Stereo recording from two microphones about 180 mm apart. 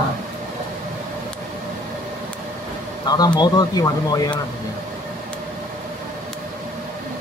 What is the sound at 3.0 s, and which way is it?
Speech, 20° left (ahead or behind).